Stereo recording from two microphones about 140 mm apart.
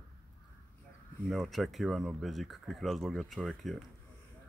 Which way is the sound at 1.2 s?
Centre (ahead or behind).